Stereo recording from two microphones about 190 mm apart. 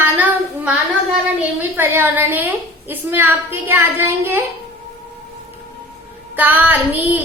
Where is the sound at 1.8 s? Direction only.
10° right (ahead or behind).